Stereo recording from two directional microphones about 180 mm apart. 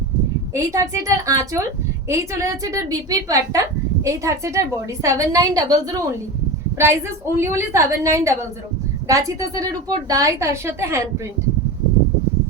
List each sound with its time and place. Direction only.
0.5 s a woman's voice: 15° right (ahead or behind)